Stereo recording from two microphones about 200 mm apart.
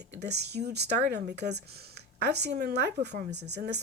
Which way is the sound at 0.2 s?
55° right (ahead or behind).